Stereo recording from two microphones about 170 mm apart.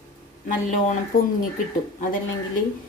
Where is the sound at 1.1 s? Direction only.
55° left (ahead or behind).